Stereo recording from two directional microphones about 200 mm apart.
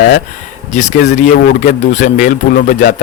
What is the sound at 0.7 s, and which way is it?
Speech, 35° left (ahead or behind).